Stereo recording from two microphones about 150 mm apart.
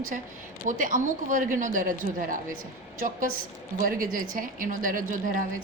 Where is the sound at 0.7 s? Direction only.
60° right (ahead or behind).